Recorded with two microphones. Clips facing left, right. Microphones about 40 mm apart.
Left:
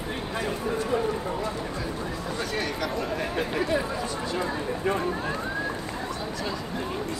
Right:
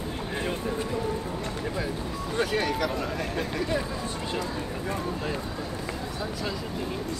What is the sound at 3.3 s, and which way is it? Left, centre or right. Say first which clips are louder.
Speech: left 3 dB; centre.